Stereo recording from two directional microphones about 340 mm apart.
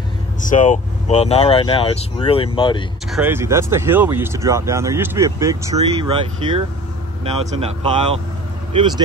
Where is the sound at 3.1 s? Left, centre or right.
Centre.